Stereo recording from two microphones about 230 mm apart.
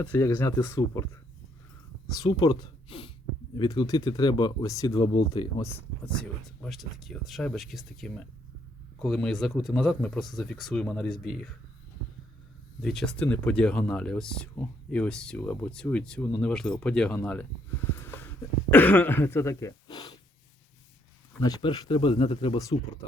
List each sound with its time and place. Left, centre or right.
0.1 s speech: centre
2.0 s speech: centre
6.6 s speech: centre
12.8 s speech: centre
17.8 s a sound: centre
18.7 s speech: centre
21.4 s speech: centre